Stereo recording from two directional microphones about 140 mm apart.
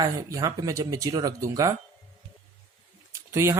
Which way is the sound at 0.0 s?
25° right (ahead or behind).